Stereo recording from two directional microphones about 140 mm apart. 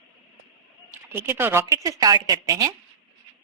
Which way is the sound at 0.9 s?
15° right (ahead or behind).